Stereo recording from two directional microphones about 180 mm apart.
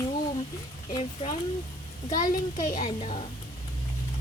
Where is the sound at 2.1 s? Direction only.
20° left (ahead or behind).